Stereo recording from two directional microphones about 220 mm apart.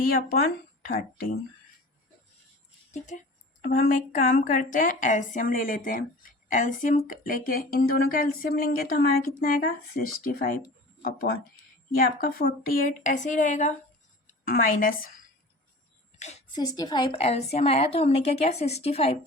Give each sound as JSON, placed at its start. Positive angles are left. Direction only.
{"t": 2.9, "sound": "a woman's voice", "side_deg": 35}
{"t": 16.1, "sound": "a sound", "side_deg": 30}
{"t": 16.6, "sound": "a woman's voice", "side_deg": 15}